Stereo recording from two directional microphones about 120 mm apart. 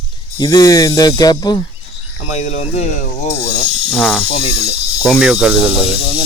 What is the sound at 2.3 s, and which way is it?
Speech, 75° left (ahead or behind).